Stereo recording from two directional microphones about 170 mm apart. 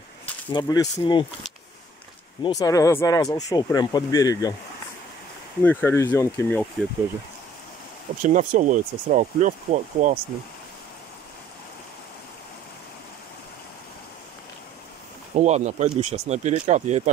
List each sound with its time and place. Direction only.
0.5 s speech: 25° left (ahead or behind)
2.4 s speech: 20° left (ahead or behind)
5.6 s speech: 10° left (ahead or behind)
8.2 s speech: 45° right (ahead or behind)
15.3 s speech: 40° right (ahead or behind)